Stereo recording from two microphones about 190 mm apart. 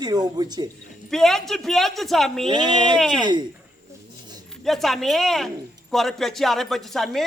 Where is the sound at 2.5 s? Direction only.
25° right (ahead or behind).